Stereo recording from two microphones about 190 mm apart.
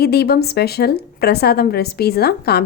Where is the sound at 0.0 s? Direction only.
55° left (ahead or behind).